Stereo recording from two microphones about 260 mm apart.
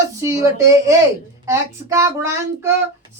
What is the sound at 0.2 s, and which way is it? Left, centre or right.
Speech, centre.